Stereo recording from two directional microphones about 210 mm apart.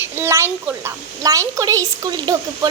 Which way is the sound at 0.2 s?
10° right (ahead or behind).